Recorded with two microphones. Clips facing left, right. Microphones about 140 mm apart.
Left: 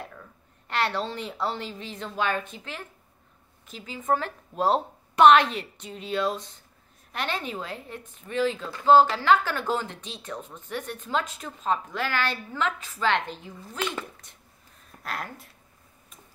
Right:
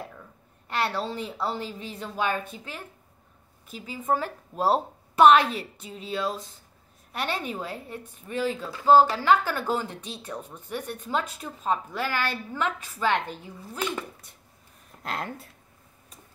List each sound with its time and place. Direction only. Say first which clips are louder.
0.7 s a woman's voice: even; 5° right (ahead or behind)
15.0 s speech: right 2 dB; 25° right (ahead or behind)